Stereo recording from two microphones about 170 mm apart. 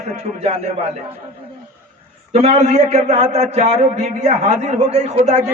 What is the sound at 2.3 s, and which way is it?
A man's voice, 40° right (ahead or behind).